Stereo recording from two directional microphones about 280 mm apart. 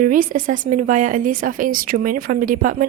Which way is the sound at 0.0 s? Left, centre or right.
Right.